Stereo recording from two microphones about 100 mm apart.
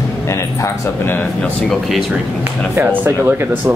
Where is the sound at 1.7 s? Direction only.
Centre (ahead or behind).